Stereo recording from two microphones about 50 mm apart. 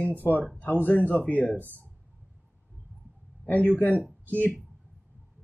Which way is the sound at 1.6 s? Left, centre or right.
Right.